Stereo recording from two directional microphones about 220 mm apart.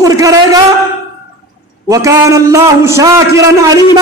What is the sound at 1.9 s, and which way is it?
A man's voice, 15° right (ahead or behind).